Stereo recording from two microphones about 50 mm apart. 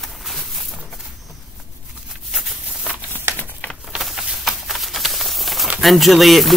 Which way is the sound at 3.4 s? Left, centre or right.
Left.